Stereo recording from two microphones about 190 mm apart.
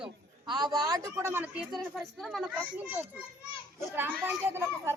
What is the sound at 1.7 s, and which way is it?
Speech, centre (ahead or behind).